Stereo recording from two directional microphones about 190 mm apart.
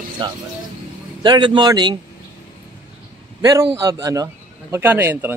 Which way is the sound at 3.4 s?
15° right (ahead or behind).